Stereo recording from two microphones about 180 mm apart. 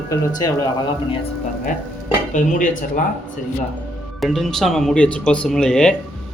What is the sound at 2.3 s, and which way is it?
Speech, 45° left (ahead or behind).